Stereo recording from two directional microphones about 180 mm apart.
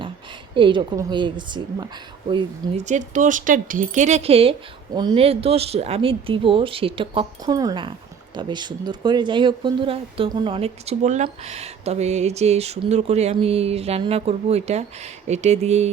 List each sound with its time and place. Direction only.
0.5 s speech: 25° right (ahead or behind)
2.3 s speech: 40° right (ahead or behind)